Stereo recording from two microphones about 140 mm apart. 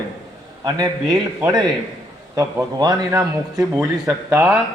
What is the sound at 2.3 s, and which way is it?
A man's voice, 25° right (ahead or behind).